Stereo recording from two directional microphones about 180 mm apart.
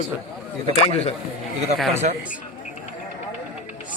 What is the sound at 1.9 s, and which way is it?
Speech, 40° right (ahead or behind).